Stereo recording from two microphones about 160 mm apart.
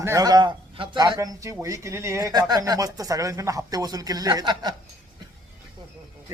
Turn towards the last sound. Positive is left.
turn(degrees=-25)  # may be behind; listen again after turning